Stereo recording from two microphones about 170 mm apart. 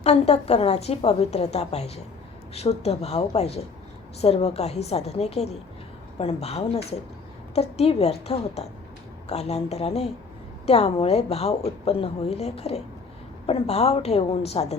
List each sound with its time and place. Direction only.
0.0 s a woman's voice: 40° left (ahead or behind)